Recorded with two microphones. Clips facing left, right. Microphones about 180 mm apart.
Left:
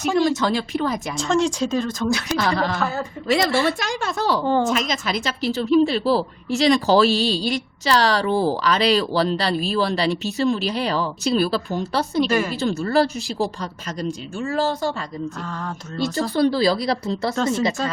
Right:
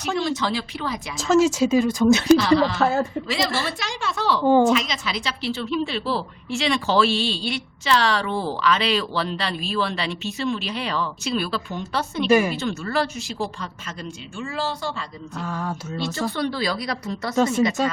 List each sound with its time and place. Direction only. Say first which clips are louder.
0.2 s a woman's voice: left 6 dB; 45° left (ahead or behind)
1.1 s speech: right 5 dB; 5° right (ahead or behind)
2.4 s a woman's voice: right 3 dB; 50° left (ahead or behind)
4.4 s speech: right 6 dB; 10° right (ahead or behind)
4.7 s a woman's voice: even; 45° left (ahead or behind)
12.3 s speech: right 4 dB; 10° right (ahead or behind)
12.5 s a woman's voice: left 5 dB; 35° left (ahead or behind)
15.4 s speech: right 2 dB; 5° right (ahead or behind)
16.3 s a woman's voice: left 7 dB; 35° left (ahead or behind)
17.3 s speech: right 5 dB; 10° right (ahead or behind)